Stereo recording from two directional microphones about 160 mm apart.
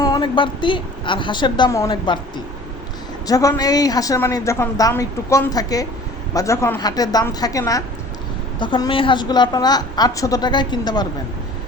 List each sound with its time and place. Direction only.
0.0 s a woman's voice: 25° left (ahead or behind)
3.2 s a woman's voice: 20° left (ahead or behind)